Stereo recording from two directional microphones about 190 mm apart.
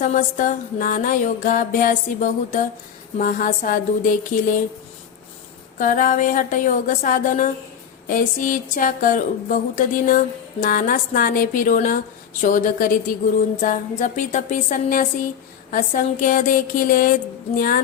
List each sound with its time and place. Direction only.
0.0 s speech: 40° left (ahead or behind)
5.8 s speech: 45° left (ahead or behind)